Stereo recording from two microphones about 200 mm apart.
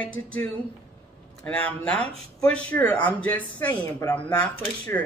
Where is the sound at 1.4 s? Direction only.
5° left (ahead or behind).